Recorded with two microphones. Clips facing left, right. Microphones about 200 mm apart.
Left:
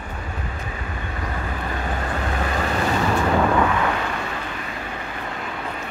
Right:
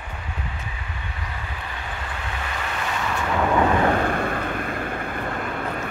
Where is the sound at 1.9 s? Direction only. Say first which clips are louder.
Left 7 dB; 45° left (ahead or behind).